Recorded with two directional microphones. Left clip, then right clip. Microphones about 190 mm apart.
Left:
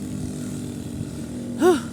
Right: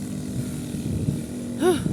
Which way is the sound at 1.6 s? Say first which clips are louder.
Left 3 dB; 25° left (ahead or behind).